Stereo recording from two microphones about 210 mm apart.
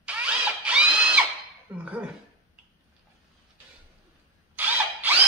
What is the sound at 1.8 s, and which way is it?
Speech, 5° right (ahead or behind).